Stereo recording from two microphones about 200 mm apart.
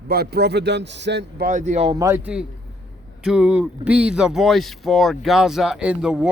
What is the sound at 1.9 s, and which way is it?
Speech, 15° right (ahead or behind).